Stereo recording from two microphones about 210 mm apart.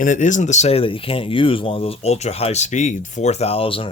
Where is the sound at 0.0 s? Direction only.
35° left (ahead or behind).